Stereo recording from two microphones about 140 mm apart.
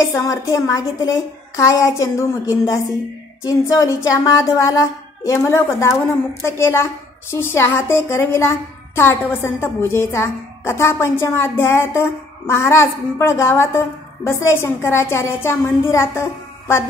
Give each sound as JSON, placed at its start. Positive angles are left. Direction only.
{"t": 0.0, "sound": "a woman's voice", "side_deg": 20}